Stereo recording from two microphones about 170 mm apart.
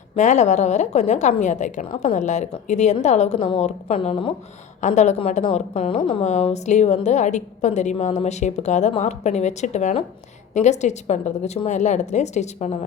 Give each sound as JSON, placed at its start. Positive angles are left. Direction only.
{"t": 0.2, "sound": "a woman's voice", "side_deg": 45}
{"t": 4.8, "sound": "a woman's voice", "side_deg": 45}